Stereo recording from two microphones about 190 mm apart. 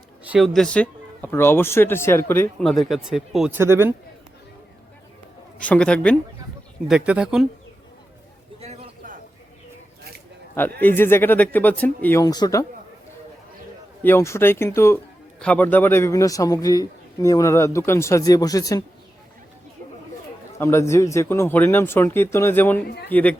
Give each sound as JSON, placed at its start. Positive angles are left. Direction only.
{"t": 0.3, "sound": "speech", "side_deg": 0}
{"t": 3.6, "sound": "a man's voice", "side_deg": -15}
{"t": 5.5, "sound": "speech", "side_deg": 5}
{"t": 6.8, "sound": "speech", "side_deg": -5}
{"t": 8.6, "sound": "a sound", "side_deg": -35}
{"t": 10.5, "sound": "a man's voice", "side_deg": 10}
{"t": 14.0, "sound": "a man's voice", "side_deg": 15}
{"t": 20.6, "sound": "a man's voice", "side_deg": 15}